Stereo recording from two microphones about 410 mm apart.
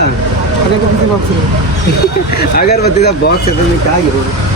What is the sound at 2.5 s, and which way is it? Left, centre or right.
Speech, left.